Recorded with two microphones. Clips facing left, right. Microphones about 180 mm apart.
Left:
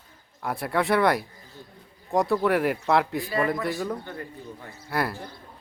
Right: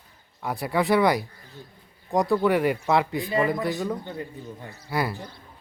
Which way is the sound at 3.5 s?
Centre (ahead or behind).